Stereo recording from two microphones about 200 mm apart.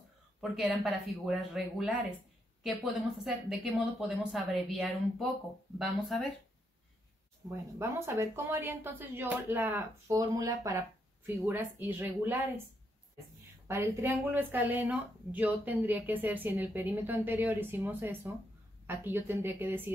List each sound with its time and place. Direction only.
0.4 s speech: centre (ahead or behind)
7.4 s speech: 15° right (ahead or behind)
13.7 s speech: 15° right (ahead or behind)